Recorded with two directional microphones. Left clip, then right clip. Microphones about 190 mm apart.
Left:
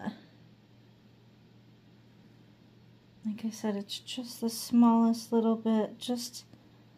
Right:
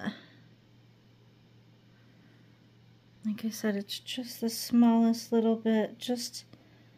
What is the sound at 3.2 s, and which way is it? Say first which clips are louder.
Speech: right 2 dB; 30° right (ahead or behind).